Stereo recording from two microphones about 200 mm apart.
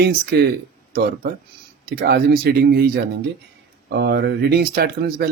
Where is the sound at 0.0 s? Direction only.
55° right (ahead or behind).